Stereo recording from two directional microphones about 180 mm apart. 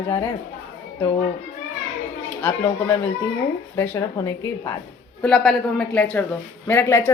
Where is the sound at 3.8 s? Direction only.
15° left (ahead or behind).